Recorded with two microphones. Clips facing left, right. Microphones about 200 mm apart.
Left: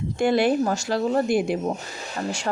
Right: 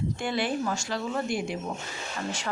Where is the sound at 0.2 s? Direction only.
40° left (ahead or behind).